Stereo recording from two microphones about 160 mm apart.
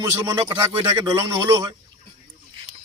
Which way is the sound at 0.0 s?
20° right (ahead or behind).